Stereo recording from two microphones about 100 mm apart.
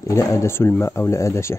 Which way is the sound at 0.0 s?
30° left (ahead or behind).